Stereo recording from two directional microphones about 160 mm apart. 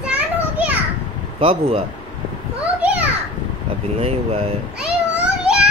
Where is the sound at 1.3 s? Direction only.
35° right (ahead or behind).